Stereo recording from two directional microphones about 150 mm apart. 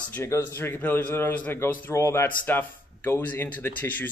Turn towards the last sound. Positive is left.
turn(degrees=15)  # may be behind; listen again after turning